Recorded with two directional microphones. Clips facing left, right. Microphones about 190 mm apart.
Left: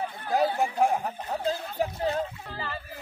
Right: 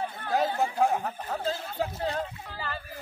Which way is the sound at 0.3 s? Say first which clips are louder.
Left 2 dB; 15° left (ahead or behind).